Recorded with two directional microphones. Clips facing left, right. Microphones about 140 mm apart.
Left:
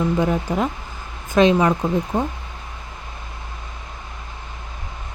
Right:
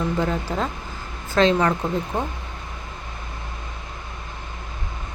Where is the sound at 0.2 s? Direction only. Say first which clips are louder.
Left 3 dB; 15° left (ahead or behind).